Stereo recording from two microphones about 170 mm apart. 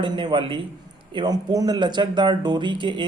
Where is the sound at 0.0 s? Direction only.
30° right (ahead or behind).